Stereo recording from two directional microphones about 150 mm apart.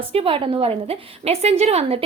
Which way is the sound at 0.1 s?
40° right (ahead or behind).